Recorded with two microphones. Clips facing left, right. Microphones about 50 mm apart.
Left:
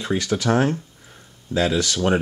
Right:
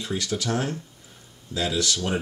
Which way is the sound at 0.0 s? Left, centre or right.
Left.